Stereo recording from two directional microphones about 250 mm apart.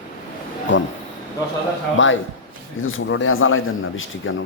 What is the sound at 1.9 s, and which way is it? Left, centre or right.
A man's voice, left.